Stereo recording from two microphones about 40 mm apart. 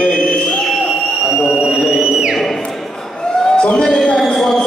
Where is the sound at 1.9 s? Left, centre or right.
Centre.